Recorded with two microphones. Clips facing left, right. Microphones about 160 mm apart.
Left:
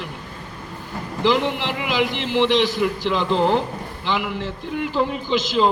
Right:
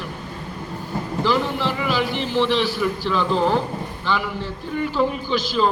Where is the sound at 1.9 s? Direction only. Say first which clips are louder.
Left 4 dB; 15° left (ahead or behind).